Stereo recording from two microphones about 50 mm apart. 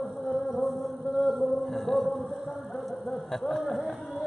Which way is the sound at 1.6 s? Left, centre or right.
Centre.